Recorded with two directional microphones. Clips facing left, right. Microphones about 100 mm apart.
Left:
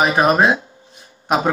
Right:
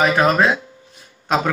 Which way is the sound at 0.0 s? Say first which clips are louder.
Left 1 dB; 20° left (ahead or behind).